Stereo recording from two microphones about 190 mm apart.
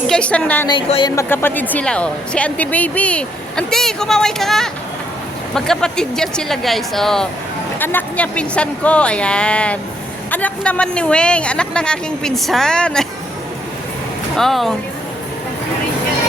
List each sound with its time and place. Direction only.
0.1 s a woman's voice: 5° left (ahead or behind)
0.7 s speech: 25° left (ahead or behind)
1.1 s speech: 15° left (ahead or behind)
14.3 s speech: centre (ahead or behind)